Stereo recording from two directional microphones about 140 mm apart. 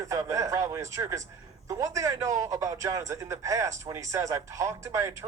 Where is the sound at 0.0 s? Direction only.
20° right (ahead or behind).